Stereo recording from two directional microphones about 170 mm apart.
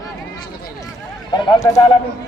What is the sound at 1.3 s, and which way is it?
Speech, 25° left (ahead or behind).